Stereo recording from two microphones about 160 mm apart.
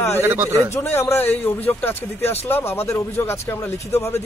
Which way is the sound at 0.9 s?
15° left (ahead or behind).